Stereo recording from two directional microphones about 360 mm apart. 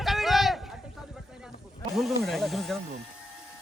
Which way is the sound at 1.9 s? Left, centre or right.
Centre.